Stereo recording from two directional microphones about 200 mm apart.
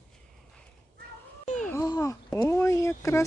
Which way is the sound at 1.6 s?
15° left (ahead or behind).